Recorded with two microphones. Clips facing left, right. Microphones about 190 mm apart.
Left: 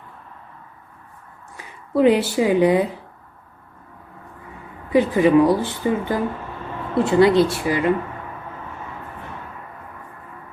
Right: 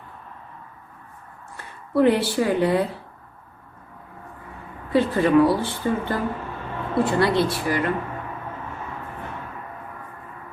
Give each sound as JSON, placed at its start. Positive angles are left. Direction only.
{"t": 1.5, "sound": "a woman's voice", "side_deg": 20}
{"t": 4.9, "sound": "speech", "side_deg": 15}